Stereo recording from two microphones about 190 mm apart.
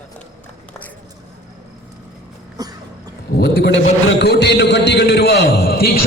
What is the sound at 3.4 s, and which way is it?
A man's voice, 60° left (ahead or behind).